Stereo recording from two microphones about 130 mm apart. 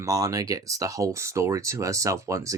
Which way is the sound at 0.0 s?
25° right (ahead or behind).